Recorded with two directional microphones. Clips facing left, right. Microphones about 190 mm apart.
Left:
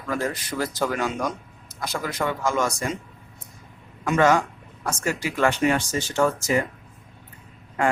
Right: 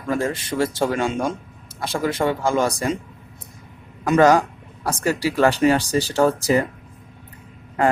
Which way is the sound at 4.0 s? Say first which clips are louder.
Right 4 dB; 35° right (ahead or behind).